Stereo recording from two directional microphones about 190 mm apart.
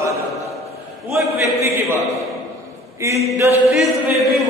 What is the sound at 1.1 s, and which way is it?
Speech, 10° right (ahead or behind).